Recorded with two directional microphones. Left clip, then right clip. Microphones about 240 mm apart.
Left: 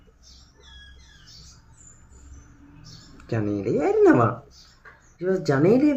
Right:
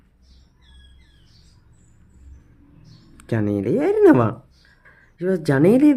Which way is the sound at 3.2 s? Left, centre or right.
Right.